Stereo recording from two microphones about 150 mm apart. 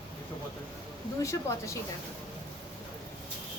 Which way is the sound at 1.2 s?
20° left (ahead or behind).